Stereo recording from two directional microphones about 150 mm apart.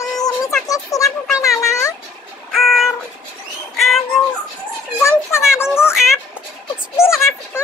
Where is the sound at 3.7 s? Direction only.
Centre (ahead or behind).